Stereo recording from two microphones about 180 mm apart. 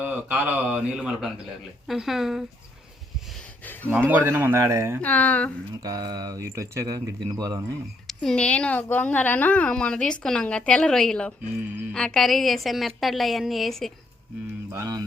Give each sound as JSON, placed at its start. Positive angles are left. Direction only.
{"t": 0.0, "sound": "a woman's voice", "side_deg": -10}
{"t": 3.6, "sound": "a sound", "side_deg": 10}
{"t": 3.8, "sound": "speech", "side_deg": -10}
{"t": 4.9, "sound": "speech", "side_deg": 10}
{"t": 5.8, "sound": "speech", "side_deg": -20}
{"t": 8.0, "sound": "a woman's voice", "side_deg": 0}
{"t": 14.7, "sound": "speech", "side_deg": -20}